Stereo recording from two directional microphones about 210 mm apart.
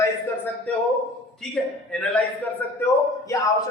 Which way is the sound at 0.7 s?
5° left (ahead or behind).